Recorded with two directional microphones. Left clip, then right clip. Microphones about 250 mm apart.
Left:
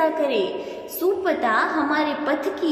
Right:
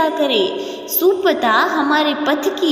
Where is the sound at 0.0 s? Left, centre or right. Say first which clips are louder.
Right 5 dB; right.